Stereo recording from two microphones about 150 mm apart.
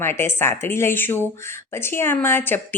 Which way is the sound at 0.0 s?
15° left (ahead or behind).